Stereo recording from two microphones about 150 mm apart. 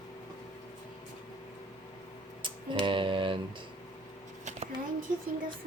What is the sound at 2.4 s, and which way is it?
Typing, 35° right (ahead or behind).